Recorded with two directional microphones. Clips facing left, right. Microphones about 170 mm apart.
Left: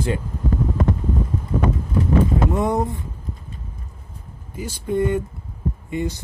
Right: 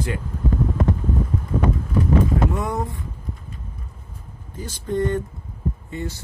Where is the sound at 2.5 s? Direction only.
20° left (ahead or behind).